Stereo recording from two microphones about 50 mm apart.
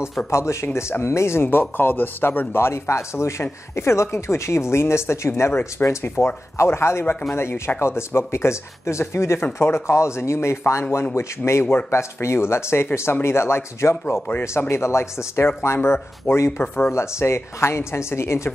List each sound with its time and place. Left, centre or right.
0.3 s speech: left
5.9 s speech: left
9.9 s speech: left
16.9 s speech: left